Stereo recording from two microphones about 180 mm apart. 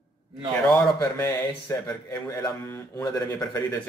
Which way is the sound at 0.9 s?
15° left (ahead or behind).